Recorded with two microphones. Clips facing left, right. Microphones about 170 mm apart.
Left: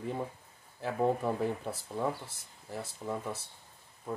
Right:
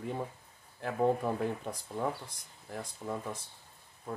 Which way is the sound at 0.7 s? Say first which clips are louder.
Right 1 dB; centre (ahead or behind).